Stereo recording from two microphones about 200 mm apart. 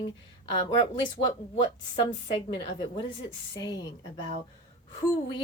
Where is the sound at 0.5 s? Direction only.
25° left (ahead or behind).